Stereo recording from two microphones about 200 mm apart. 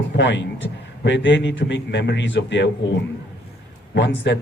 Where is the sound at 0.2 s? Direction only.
65° left (ahead or behind).